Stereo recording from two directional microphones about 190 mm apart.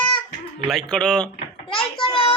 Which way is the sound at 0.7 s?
5° left (ahead or behind).